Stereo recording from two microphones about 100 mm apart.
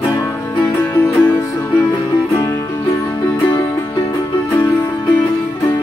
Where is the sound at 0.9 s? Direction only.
15° left (ahead or behind).